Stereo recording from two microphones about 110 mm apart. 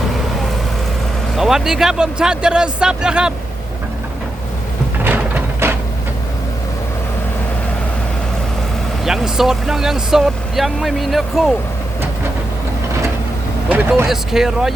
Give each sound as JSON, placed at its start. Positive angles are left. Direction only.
{"t": 1.4, "sound": "speech", "side_deg": -5}
{"t": 5.0, "sound": "a sound", "side_deg": -15}
{"t": 9.0, "sound": "speech", "side_deg": -5}
{"t": 13.7, "sound": "speech", "side_deg": -20}
{"t": 14.1, "sound": "speech", "side_deg": -5}